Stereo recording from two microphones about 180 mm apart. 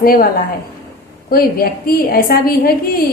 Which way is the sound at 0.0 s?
55° left (ahead or behind).